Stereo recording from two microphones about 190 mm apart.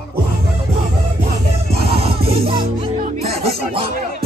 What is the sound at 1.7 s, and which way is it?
Music, 30° right (ahead or behind).